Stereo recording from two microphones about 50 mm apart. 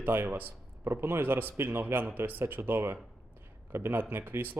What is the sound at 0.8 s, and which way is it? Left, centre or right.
Speech, right.